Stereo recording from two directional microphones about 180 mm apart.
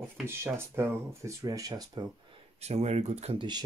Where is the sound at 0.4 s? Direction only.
15° right (ahead or behind).